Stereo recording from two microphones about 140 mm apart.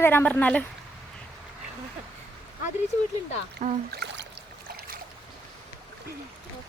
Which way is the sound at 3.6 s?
60° right (ahead or behind).